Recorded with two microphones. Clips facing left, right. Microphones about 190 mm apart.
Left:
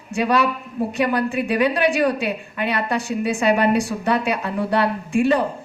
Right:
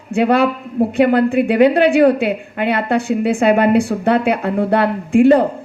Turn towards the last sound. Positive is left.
turn(degrees=-55)  # may be behind; listen again after turning